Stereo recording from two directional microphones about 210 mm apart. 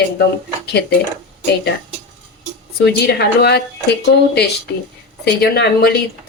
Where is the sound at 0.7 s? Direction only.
50° left (ahead or behind).